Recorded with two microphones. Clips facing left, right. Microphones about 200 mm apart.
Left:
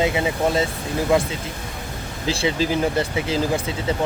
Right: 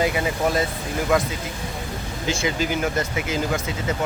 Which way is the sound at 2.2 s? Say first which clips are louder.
Left 3 dB; 30° left (ahead or behind).